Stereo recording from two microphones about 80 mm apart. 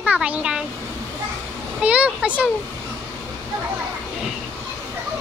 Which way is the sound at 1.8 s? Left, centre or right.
Centre.